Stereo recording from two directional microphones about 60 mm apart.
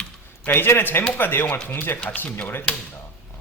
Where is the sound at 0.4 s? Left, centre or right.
Left.